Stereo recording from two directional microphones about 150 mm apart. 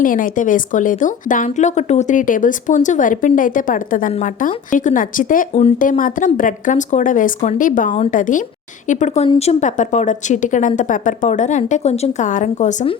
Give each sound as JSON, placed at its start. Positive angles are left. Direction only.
{"t": 0.0, "sound": "a woman's voice", "side_deg": 65}